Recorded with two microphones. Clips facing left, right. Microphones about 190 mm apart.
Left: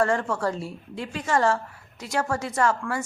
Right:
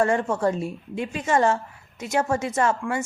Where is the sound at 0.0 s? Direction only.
20° right (ahead or behind).